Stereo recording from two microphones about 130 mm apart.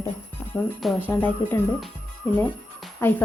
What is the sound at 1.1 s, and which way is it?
Speech, 15° left (ahead or behind).